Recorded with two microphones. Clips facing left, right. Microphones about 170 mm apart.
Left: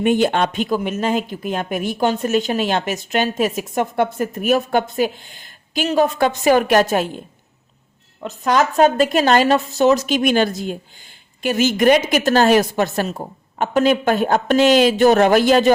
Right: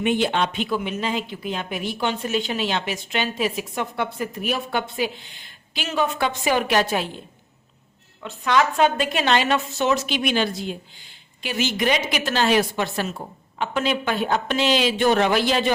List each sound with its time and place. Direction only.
0.0 s speech: 45° left (ahead or behind)
8.2 s speech: 40° left (ahead or behind)